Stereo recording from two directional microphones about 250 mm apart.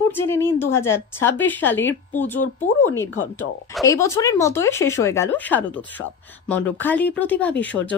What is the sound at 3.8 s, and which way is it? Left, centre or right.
Speech, centre.